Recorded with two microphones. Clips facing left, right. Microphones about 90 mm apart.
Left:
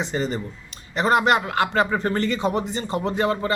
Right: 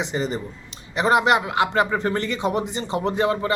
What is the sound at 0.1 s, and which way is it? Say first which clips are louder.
A man's voice: even; 20° right (ahead or behind).